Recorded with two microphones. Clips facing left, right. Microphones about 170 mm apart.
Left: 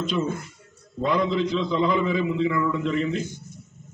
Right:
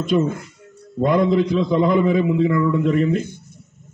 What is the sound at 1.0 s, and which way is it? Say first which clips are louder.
A man's voice: right 6 dB; 50° right (ahead or behind).